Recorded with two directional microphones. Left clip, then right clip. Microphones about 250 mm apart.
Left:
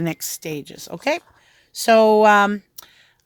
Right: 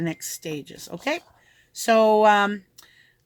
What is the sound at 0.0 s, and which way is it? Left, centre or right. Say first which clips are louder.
Speech: left 4 dB; left.